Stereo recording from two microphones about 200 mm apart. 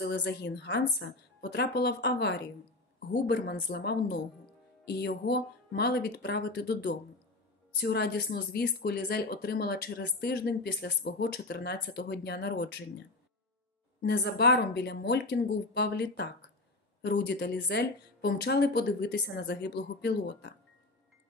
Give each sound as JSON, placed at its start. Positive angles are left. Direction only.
{"t": 0.0, "sound": "speech", "side_deg": 55}
{"t": 14.0, "sound": "speech", "side_deg": 55}